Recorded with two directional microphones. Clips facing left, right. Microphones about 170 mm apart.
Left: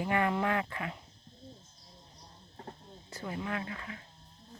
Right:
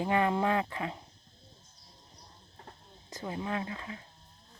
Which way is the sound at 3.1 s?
20° right (ahead or behind).